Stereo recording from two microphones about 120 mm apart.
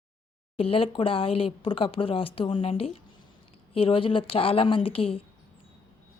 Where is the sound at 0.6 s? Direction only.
50° left (ahead or behind).